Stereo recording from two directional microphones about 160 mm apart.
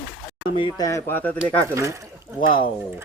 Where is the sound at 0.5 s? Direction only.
30° left (ahead or behind).